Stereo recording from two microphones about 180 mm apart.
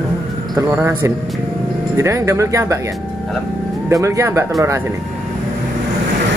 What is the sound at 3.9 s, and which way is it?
Speech, 15° right (ahead or behind).